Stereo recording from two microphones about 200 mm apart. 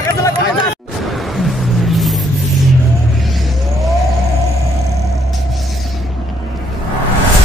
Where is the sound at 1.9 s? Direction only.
Centre (ahead or behind).